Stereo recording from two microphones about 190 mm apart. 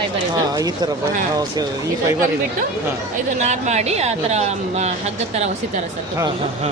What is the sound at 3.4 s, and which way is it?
Speech, 35° right (ahead or behind).